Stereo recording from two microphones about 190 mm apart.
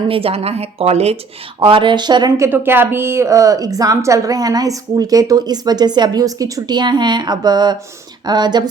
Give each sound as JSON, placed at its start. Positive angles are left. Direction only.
{"t": 0.1, "sound": "a woman's voice", "side_deg": -30}